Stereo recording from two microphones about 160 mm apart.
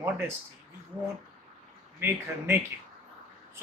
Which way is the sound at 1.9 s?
15° right (ahead or behind).